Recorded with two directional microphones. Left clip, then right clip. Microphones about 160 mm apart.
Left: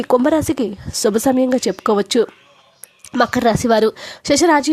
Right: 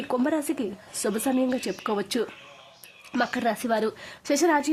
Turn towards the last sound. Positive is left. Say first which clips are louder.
# left 9 dB
turn(degrees=40)  # may be behind; listen again after turning